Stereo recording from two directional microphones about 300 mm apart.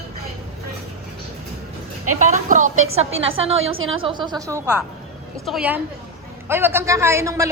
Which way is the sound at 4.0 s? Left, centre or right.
Centre.